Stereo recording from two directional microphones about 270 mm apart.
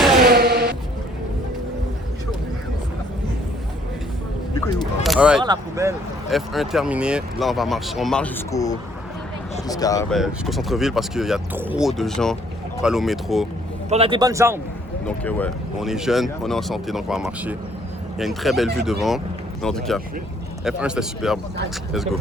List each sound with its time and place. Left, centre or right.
0.2 s a sound: right
5.0 s single-lens reflex camera: centre
5.4 s a man's voice: centre
6.3 s speech: centre
8.5 s speech: centre
10.2 s speech: centre
13.9 s a man's voice: centre
15.0 s speech: centre